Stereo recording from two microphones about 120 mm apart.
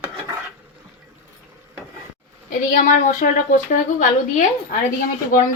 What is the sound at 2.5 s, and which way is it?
A woman's voice, 90° left.